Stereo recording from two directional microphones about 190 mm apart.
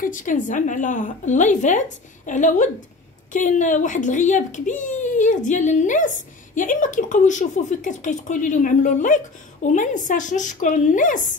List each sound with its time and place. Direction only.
0.0 s a child's voice: 45° left (ahead or behind)